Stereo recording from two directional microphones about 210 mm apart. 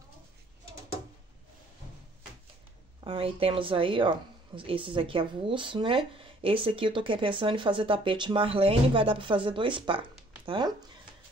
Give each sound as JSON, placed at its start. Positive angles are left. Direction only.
{"t": 3.0, "sound": "speech", "side_deg": -25}